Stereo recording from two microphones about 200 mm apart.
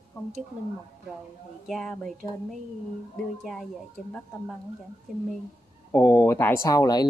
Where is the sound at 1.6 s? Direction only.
Centre (ahead or behind).